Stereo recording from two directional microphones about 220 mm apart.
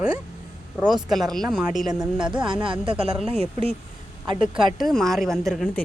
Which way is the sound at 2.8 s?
25° right (ahead or behind).